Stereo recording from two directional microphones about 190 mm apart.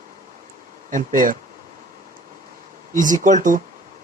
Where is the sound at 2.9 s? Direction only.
45° right (ahead or behind).